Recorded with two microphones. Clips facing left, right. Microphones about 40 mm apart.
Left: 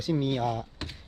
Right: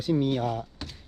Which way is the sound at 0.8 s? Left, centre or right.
Left.